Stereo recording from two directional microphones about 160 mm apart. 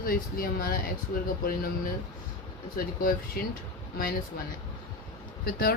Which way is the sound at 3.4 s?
70° left (ahead or behind).